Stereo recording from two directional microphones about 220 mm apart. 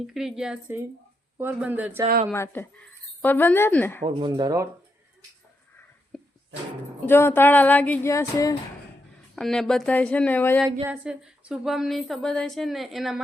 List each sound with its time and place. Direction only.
0.1 s a woman's voice: centre (ahead or behind)
2.3 s a sound: 10° left (ahead or behind)
4.0 s speech: 20° right (ahead or behind)
6.1 s music: centre (ahead or behind)
7.0 s a sound: 10° left (ahead or behind)
9.3 s a woman's voice: centre (ahead or behind)
10.8 s a woman's voice: 5° right (ahead or behind)